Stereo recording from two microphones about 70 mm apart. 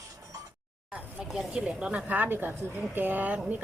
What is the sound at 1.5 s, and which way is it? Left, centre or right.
A woman's voice, centre.